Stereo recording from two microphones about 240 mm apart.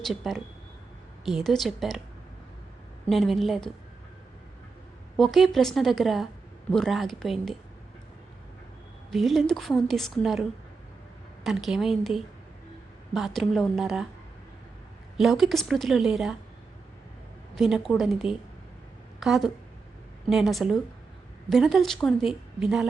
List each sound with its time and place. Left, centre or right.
0.0 s a woman's voice: centre
3.1 s a woman's voice: centre
5.1 s a woman's voice: centre
9.0 s a woman's voice: centre
11.4 s a woman's voice: centre
15.2 s a woman's voice: centre
17.5 s a woman's voice: centre